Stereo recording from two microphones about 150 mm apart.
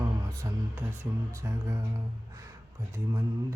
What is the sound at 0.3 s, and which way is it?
Music, 20° right (ahead or behind).